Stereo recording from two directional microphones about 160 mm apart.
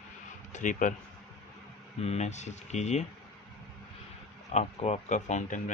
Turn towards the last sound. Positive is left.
turn(degrees=50)  # may be behind; listen again after turning